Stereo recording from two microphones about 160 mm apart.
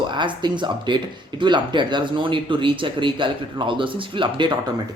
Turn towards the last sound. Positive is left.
turn(degrees=-30)  # may be behind; listen again after turning